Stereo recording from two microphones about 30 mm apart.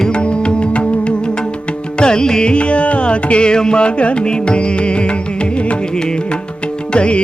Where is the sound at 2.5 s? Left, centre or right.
Left.